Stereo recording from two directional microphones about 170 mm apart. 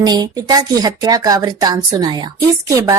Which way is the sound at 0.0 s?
25° right (ahead or behind).